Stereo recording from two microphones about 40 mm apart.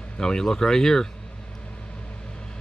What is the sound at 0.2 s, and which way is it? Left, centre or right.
Speech, centre.